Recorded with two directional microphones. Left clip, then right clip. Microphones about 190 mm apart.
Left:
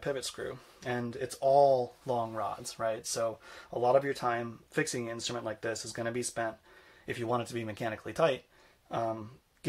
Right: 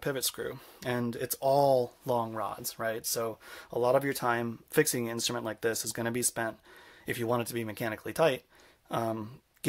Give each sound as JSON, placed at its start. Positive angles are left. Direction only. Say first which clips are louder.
{"t": 0.0, "sound": "speech", "louder": "right 2 dB", "side_deg": -45}